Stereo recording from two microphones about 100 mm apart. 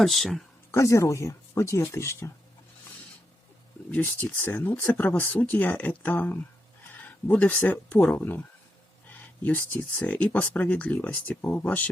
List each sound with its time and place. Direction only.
0.0 s speech: centre (ahead or behind)
0.7 s speech: 30° left (ahead or behind)
3.9 s speech: 20° left (ahead or behind)